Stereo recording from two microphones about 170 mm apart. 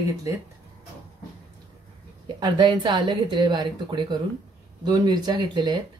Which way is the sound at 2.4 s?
25° right (ahead or behind).